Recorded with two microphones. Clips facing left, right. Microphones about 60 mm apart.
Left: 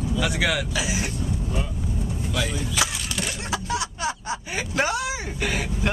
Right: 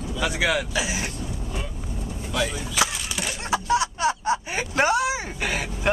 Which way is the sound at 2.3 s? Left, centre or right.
Centre.